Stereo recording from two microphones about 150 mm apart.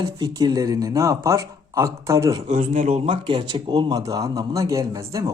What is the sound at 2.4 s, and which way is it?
Speech, 50° right (ahead or behind).